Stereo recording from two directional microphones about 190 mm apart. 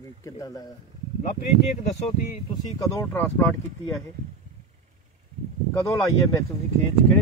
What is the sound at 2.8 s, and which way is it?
Speech, 15° left (ahead or behind).